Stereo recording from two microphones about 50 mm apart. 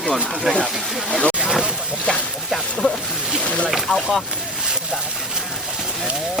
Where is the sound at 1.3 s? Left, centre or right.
Centre.